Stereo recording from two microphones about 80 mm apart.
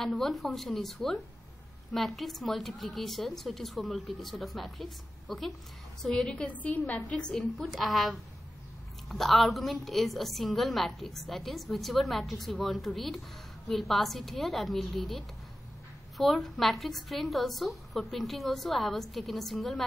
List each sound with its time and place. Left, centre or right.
0.2 s a woman's voice: centre
6.7 s a woman's voice: left
7.1 s a woman's voice: centre